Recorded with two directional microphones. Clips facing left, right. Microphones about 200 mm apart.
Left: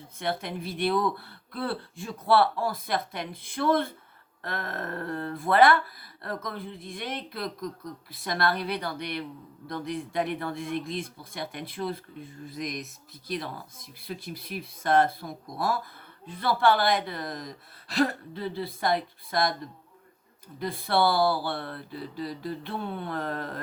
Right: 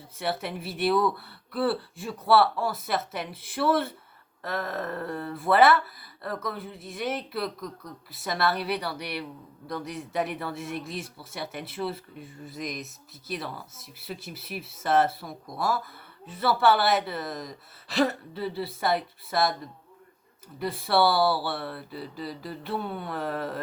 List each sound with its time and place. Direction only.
0.2 s speech: 5° right (ahead or behind)
20.6 s speech: 5° right (ahead or behind)